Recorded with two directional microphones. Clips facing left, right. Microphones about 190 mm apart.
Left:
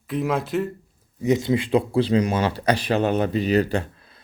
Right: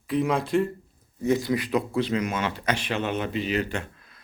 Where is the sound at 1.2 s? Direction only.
20° left (ahead or behind).